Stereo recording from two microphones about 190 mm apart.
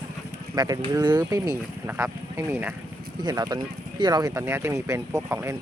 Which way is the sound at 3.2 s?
20° right (ahead or behind).